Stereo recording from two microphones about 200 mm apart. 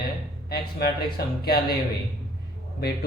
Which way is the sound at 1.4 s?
50° left (ahead or behind).